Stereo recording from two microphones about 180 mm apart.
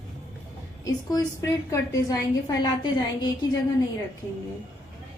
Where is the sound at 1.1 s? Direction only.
15° left (ahead or behind).